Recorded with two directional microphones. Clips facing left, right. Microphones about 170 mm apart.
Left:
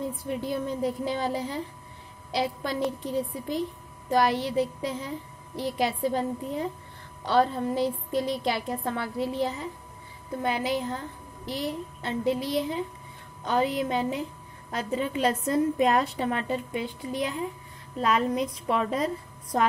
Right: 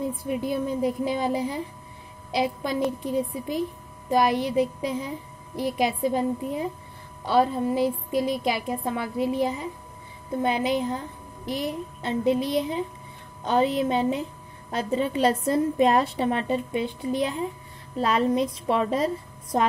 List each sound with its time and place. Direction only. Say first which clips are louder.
0.1 s a woman's voice: right 3 dB; 10° right (ahead or behind); by 19.6 s 30° right (ahead or behind)